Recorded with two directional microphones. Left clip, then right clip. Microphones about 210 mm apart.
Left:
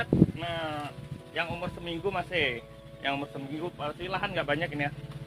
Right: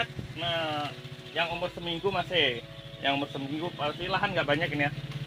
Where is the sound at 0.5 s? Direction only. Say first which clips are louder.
Right 3 dB; 25° right (ahead or behind).